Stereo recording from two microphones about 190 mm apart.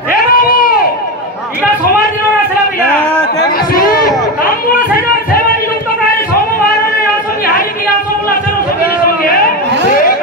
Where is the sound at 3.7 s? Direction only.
50° left (ahead or behind).